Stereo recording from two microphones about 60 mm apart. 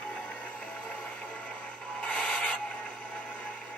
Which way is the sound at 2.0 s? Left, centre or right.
Centre.